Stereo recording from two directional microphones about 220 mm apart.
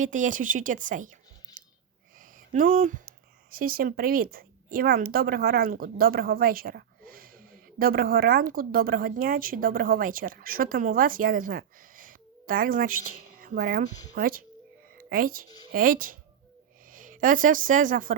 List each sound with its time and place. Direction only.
0.0 s speech: 35° right (ahead or behind)
1.6 s a sound: 35° right (ahead or behind)
2.1 s a woman's voice: 35° right (ahead or behind)